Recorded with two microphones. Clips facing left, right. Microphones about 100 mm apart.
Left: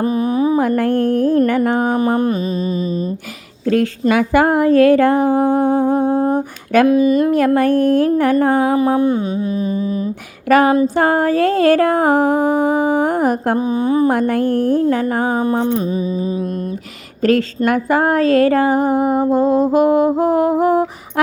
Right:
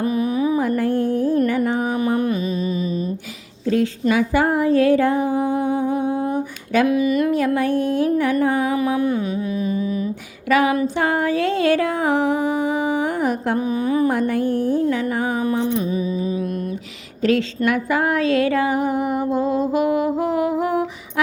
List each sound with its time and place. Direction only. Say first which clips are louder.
0.0 s mantra: left 4 dB; 35° left (ahead or behind)
0.8 s music: left 4 dB; 65° left (ahead or behind)
1.5 s a sound: left 5 dB; 60° left (ahead or behind); by 2.4 s 35° left (ahead or behind)
4.1 s humming: left 5 dB; 60° left (ahead or behind)
6.8 s music: left 5 dB; 30° left (ahead or behind)
7.3 s music: left 5 dB; 55° left (ahead or behind)
9.0 s music: left 4 dB; 25° left (ahead or behind)
10.5 s music: left 5 dB; 45° left (ahead or behind)
13.6 s a sound: left 2 dB; 25° left (ahead or behind)
14.1 s music: left 4 dB; 55° left (ahead or behind); by 16.3 s 35° left (ahead or behind)
17.2 s music: left 4 dB; 50° left (ahead or behind)